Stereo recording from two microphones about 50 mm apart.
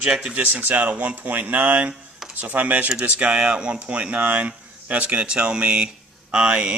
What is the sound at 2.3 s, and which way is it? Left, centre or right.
Speech, right.